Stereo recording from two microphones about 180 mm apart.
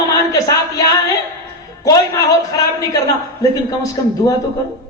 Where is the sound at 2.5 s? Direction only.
20° left (ahead or behind).